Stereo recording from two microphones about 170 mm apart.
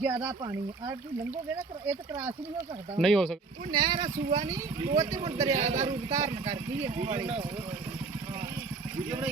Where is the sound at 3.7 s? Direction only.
25° right (ahead or behind).